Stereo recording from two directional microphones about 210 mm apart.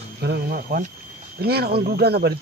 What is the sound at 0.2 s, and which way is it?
Speech, 45° right (ahead or behind).